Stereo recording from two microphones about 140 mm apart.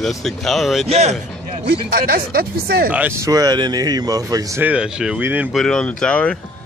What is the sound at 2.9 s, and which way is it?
Speech, 15° right (ahead or behind).